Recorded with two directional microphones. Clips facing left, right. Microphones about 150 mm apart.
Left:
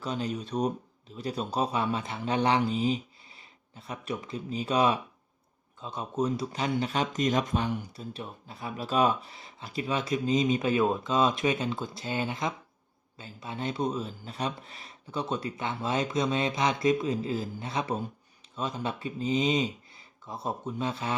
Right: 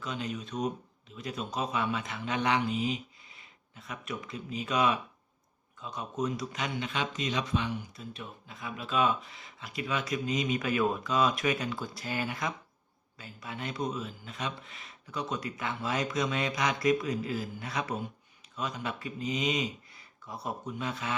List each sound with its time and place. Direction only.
0.0 s speech: 35° left (ahead or behind)
7.9 s speech: 35° left (ahead or behind)